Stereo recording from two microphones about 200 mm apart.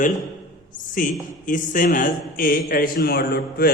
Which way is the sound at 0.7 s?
40° left (ahead or behind).